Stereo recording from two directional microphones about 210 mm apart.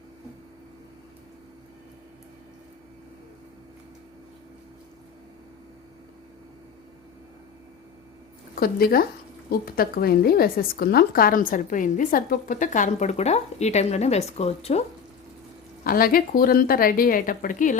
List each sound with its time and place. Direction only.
8.5 s a woman's voice: 45° left (ahead or behind)
15.8 s a woman's voice: 45° left (ahead or behind)